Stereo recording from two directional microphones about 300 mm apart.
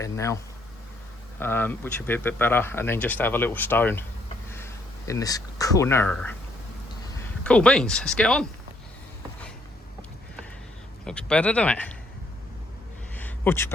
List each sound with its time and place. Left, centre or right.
0.0 s speech: centre
1.4 s speech: centre
11.0 s speech: centre
13.1 s a sound: centre